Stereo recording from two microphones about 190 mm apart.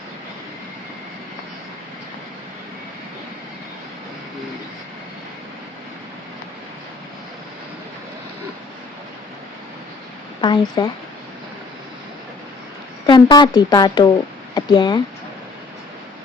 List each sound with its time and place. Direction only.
10.4 s speech: 25° left (ahead or behind)
13.1 s speech: 25° left (ahead or behind)